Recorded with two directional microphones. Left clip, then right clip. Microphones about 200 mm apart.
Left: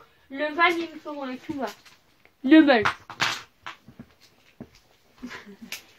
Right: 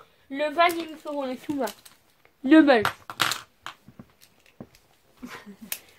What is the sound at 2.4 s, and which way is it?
Speech, 20° right (ahead or behind).